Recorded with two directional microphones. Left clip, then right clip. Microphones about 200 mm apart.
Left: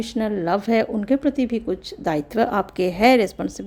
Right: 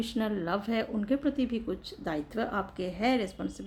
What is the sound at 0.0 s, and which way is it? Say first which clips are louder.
A woman's voice: left 9 dB; 30° left (ahead or behind).